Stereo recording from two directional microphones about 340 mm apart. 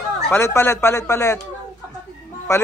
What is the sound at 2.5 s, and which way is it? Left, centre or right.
Speech, centre.